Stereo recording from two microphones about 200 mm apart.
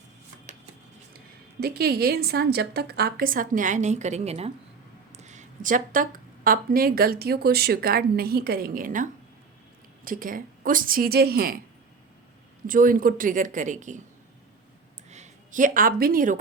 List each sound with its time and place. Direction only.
1.6 s speech: 50° right (ahead or behind)
12.6 s speech: 45° right (ahead or behind)
15.1 s speech: 40° right (ahead or behind)